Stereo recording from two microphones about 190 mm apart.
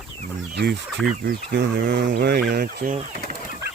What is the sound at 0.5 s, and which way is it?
Speech, 60° right (ahead or behind).